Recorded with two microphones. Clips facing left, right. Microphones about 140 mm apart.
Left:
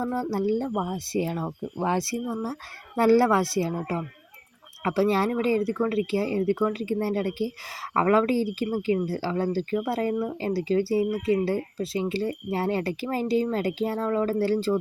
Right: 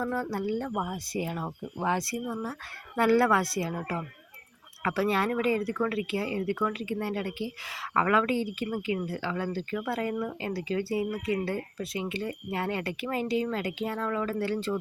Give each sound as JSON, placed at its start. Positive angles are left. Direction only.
{"t": 0.0, "sound": "speech", "side_deg": 30}